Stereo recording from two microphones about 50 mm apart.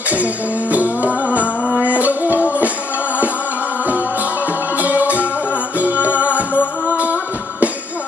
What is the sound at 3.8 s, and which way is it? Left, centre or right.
Music, right.